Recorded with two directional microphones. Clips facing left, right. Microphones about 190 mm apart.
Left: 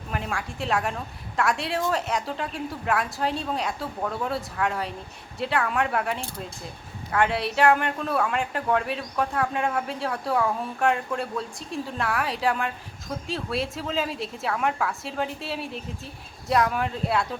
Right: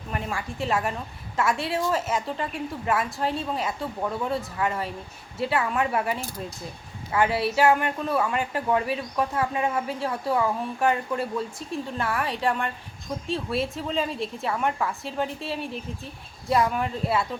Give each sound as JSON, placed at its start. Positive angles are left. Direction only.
{"t": 0.1, "sound": "speech", "side_deg": 0}